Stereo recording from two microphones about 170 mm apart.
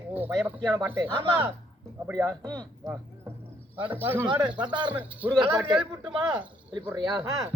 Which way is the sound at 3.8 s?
10° right (ahead or behind).